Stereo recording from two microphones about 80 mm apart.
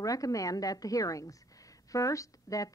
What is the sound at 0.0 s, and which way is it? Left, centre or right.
Speech, left.